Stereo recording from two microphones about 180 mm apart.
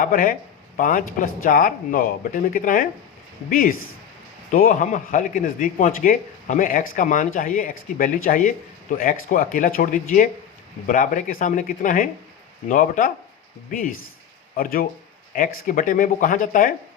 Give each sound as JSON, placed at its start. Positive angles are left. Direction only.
{"t": 0.0, "sound": "a man's voice", "side_deg": 50}